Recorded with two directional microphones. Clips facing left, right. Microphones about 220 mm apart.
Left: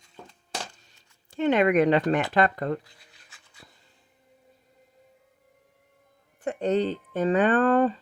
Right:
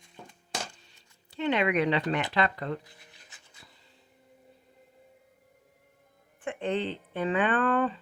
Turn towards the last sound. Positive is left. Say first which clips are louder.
# left 6 dB
turn(degrees=40)  # may be behind; listen again after turning